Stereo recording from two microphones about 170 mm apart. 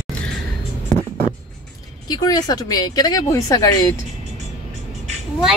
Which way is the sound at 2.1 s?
25° left (ahead or behind).